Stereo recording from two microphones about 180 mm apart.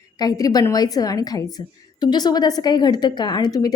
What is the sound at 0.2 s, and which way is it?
A woman's voice, 20° left (ahead or behind).